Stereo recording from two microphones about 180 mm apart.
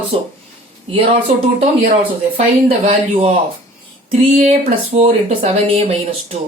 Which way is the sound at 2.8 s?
35° right (ahead or behind).